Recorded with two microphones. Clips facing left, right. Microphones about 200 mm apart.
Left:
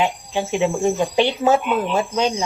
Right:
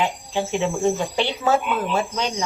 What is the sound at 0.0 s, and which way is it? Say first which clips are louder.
Speech: left 2 dB; 15° left (ahead or behind).